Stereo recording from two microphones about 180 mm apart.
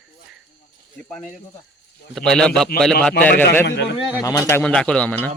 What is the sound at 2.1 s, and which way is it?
Speech, 5° left (ahead or behind).